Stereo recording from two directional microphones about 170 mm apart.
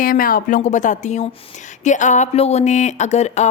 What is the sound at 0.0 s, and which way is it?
Speech, 55° left (ahead or behind).